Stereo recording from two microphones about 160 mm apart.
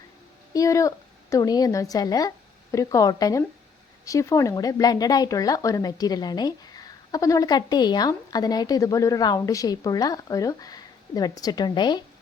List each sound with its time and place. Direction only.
0.5 s speech: 20° left (ahead or behind)